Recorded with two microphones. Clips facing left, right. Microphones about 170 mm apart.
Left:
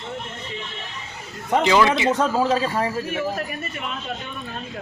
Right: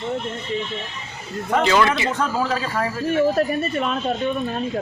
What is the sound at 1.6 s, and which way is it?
Speech, 15° left (ahead or behind).